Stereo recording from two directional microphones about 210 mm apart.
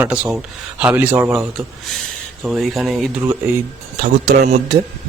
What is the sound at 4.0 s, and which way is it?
Speech, 35° right (ahead or behind).